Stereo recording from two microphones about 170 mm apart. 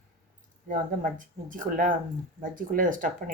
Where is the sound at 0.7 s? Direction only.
50° right (ahead or behind).